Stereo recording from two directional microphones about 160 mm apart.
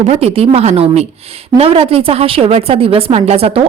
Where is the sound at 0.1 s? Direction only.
40° right (ahead or behind).